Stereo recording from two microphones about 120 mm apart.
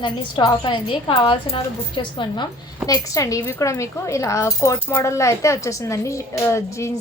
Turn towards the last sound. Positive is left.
turn(degrees=25)  # may be behind; listen again after turning